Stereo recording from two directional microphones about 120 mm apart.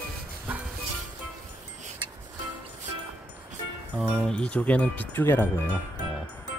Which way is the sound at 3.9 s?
5° right (ahead or behind).